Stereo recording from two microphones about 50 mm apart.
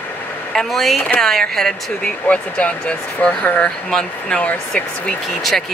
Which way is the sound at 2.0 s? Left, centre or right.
Left.